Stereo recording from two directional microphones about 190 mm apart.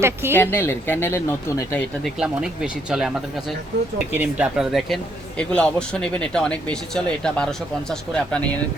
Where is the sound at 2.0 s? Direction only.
5° right (ahead or behind).